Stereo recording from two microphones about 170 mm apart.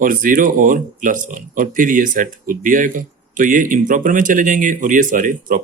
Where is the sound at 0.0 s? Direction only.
55° right (ahead or behind).